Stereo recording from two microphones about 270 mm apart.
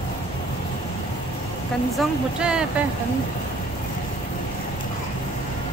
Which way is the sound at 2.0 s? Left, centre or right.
Centre.